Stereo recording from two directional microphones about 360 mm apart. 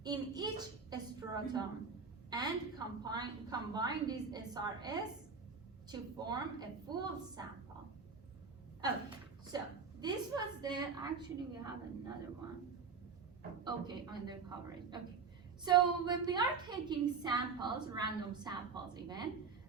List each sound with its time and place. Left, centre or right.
0.0 s a woman's voice: centre
9.5 s a woman's voice: centre
13.7 s a woman's voice: centre